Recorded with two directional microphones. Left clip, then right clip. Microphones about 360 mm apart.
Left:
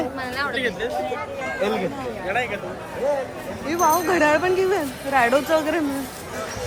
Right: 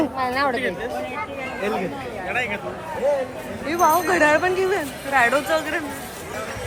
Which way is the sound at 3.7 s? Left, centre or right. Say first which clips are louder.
Right 1 dB; centre.